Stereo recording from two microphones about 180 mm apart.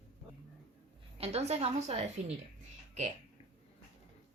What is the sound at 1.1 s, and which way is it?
Speech, 35° right (ahead or behind).